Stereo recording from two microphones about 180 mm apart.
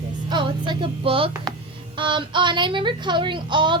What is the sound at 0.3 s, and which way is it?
A woman's voice, 25° right (ahead or behind).